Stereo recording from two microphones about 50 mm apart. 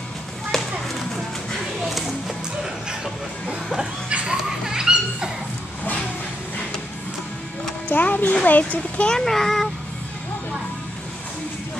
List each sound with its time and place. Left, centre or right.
0.5 s a sound: centre
1.8 s music: centre
4.1 s children playing: right
4.5 s dog: centre
7.9 s a child's voice: left
9.0 s a child's voice: centre